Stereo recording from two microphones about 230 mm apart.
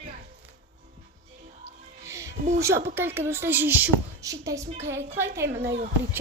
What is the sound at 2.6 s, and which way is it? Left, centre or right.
Speech, centre.